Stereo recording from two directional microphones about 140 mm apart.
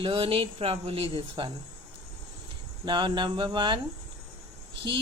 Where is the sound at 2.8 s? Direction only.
35° right (ahead or behind).